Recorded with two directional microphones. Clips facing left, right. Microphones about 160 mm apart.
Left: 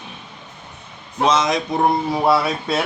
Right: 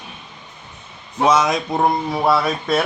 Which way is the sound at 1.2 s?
10° right (ahead or behind).